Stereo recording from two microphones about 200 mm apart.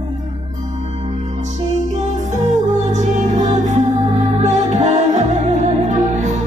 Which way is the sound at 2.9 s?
40° right (ahead or behind).